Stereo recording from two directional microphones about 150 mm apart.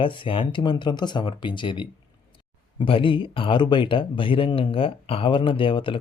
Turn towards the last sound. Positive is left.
turn(degrees=35)  # may be behind; listen again after turning